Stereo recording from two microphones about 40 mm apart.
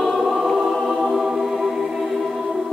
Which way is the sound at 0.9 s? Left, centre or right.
Centre.